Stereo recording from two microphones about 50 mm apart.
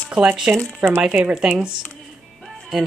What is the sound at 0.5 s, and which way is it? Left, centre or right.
Speech, right.